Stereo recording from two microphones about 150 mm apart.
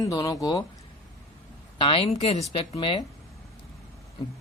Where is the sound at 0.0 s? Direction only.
25° left (ahead or behind).